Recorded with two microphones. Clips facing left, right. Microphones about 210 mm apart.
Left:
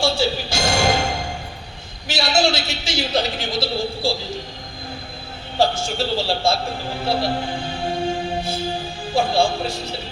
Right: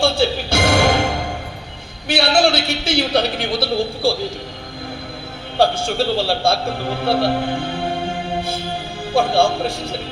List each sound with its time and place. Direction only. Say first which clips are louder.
0.0 s music: right 3 dB; 55° right (ahead or behind)
2.0 s a man's voice: right 4 dB; 55° right (ahead or behind)
5.7 s a man's voice: right 4 dB; 55° right (ahead or behind)
9.1 s a man's voice: right 3 dB; 55° right (ahead or behind)